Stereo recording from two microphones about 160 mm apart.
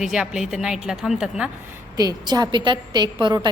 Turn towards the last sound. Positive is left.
turn(degrees=-30)  # may be behind; listen again after turning